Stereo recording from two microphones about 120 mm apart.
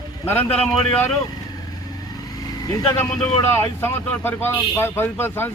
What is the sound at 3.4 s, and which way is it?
Speech, 20° left (ahead or behind).